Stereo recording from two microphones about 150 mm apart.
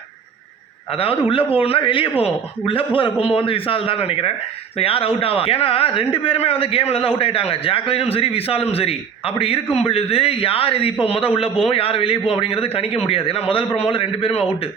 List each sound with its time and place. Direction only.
0.9 s a man's voice: 40° left (ahead or behind)